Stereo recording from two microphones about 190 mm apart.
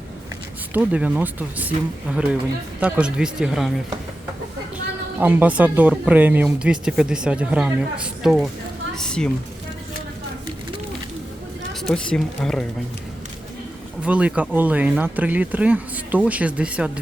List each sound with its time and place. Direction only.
0.7 s speech: 10° right (ahead or behind)
5.2 s speech: 10° right (ahead or behind)
9.0 s a sound: 5° left (ahead or behind)
11.8 s speech: 5° left (ahead or behind)
14.0 s speech: 5° right (ahead or behind)